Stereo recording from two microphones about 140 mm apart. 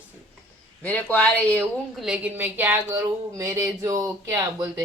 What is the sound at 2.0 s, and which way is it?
Speech, 10° right (ahead or behind).